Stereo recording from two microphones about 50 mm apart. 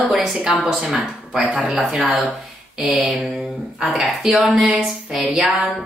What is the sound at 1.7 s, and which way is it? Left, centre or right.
Speech, centre.